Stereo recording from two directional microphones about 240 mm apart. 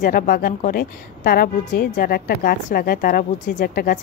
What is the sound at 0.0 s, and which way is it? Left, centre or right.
A woman's voice, left.